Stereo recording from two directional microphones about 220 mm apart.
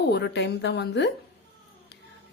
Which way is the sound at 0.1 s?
50° left (ahead or behind).